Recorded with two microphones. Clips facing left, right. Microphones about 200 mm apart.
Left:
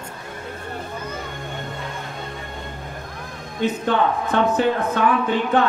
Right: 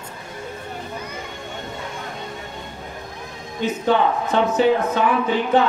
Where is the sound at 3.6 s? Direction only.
55° left (ahead or behind).